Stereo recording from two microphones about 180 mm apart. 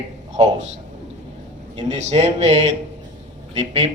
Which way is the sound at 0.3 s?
40° right (ahead or behind).